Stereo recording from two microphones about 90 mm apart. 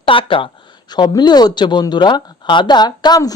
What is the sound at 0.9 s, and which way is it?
Speech, 50° left (ahead or behind).